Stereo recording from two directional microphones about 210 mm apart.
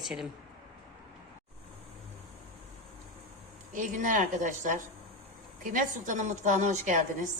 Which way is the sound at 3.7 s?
40° right (ahead or behind).